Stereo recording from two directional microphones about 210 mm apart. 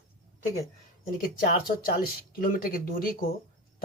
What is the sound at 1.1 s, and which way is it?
Speech, 45° left (ahead or behind).